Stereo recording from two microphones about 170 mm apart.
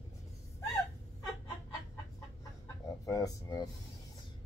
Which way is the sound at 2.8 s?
20° left (ahead or behind).